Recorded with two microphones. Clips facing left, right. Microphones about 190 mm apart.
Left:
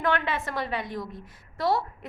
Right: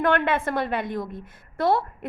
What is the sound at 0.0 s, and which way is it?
A woman's voice, 55° right (ahead or behind).